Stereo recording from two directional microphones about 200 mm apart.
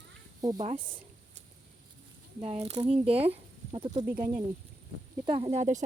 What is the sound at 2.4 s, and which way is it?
Speech, 30° right (ahead or behind).